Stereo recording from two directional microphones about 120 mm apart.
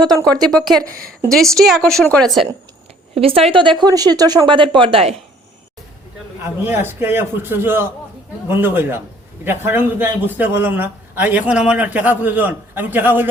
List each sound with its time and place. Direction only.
0.5 s a woman's voice: centre (ahead or behind)
3.2 s speech: 55° right (ahead or behind)
6.4 s a man's voice: 20° right (ahead or behind)